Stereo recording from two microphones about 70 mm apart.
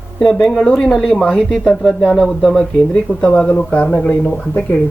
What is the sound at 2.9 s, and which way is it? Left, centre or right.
Speech, centre.